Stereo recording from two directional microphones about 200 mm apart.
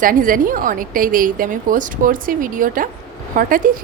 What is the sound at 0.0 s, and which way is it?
A woman's voice, 45° right (ahead or behind).